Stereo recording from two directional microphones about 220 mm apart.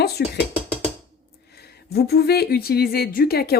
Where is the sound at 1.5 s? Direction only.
45° left (ahead or behind).